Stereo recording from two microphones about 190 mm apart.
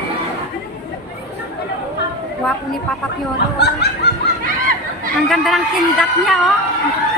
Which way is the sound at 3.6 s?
60° left (ahead or behind).